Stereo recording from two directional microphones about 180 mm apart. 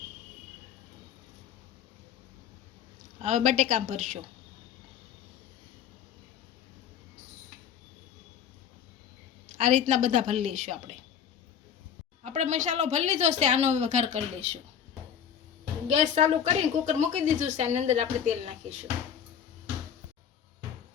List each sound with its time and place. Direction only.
3.2 s a woman's voice: 45° right (ahead or behind)
9.6 s a woman's voice: 45° right (ahead or behind)
12.2 s speech: 40° right (ahead or behind)
15.9 s speech: 40° right (ahead or behind)